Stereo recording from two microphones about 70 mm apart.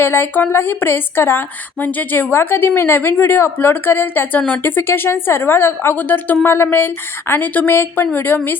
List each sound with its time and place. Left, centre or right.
0.0 s a woman's voice: left
4.4 s a woman's voice: centre
4.6 s a woman's voice: left